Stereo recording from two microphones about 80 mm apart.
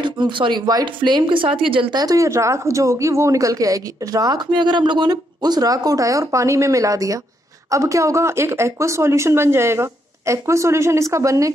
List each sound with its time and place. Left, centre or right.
0.0 s speech: right
1.7 s speech: right
4.5 s speech: right
5.1 s speech: right